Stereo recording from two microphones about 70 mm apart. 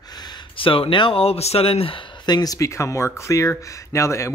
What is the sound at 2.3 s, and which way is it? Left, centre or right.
Speech, left.